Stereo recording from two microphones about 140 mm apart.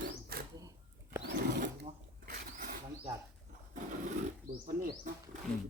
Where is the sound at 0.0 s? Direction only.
90° right.